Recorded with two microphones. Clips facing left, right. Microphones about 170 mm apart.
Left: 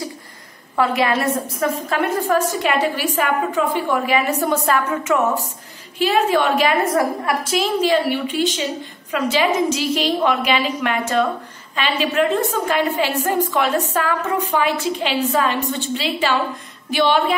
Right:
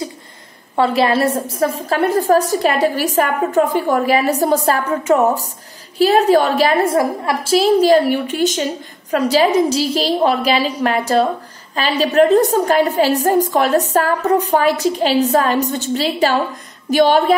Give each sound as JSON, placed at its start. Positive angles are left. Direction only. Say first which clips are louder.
{"t": 0.7, "sound": "a woman's voice", "louder": "right 4 dB", "side_deg": -30}